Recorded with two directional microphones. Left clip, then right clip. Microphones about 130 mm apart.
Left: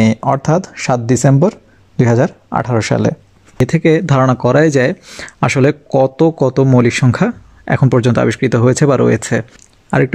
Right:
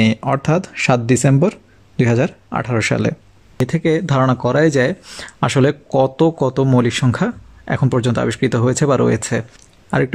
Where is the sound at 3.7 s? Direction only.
40° left (ahead or behind).